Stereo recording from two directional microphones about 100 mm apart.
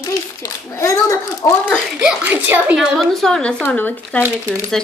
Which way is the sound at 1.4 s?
40° left (ahead or behind).